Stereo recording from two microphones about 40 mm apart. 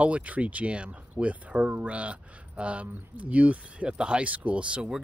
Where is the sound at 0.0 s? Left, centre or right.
Right.